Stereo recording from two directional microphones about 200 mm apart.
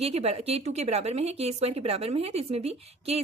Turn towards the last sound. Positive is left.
turn(degrees=-30)  # may be behind; listen again after turning